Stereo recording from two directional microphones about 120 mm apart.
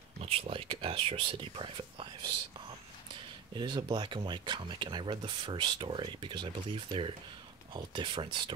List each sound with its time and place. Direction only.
0.2 s speech: 55° right (ahead or behind)
3.5 s speech: 40° right (ahead or behind)